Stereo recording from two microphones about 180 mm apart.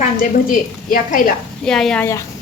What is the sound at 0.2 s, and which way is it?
A woman's voice, 50° left (ahead or behind).